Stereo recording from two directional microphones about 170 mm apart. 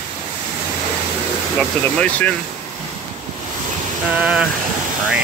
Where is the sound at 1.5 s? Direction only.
5° left (ahead or behind).